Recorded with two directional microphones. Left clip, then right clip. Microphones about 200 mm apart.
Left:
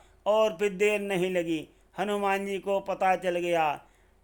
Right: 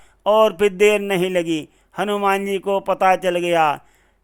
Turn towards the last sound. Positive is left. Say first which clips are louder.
# right 9 dB
turn(degrees=-25)  # may be behind; listen again after turning